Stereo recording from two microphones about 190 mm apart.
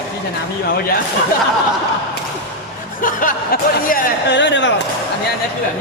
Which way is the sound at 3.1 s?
45° left (ahead or behind).